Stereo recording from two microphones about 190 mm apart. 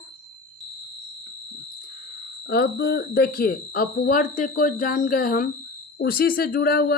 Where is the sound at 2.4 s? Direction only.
55° left (ahead or behind).